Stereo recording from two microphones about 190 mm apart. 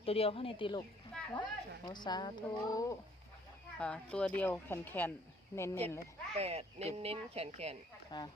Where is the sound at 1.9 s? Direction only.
25° left (ahead or behind).